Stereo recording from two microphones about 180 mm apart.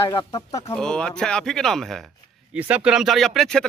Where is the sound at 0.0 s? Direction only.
20° left (ahead or behind).